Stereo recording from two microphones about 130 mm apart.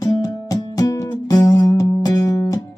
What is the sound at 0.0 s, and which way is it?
Music, 30° left (ahead or behind).